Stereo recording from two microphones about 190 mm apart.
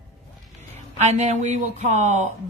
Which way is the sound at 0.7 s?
35° right (ahead or behind).